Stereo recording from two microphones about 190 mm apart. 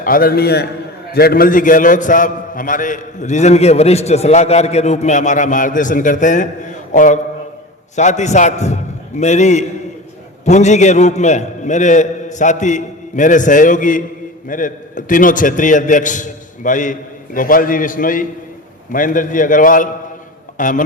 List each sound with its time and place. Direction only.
0.0 s a man's voice: 50° left (ahead or behind)
20.6 s music: 45° left (ahead or behind)